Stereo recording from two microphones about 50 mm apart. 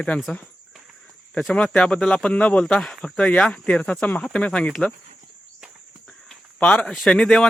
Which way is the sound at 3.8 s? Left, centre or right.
Left.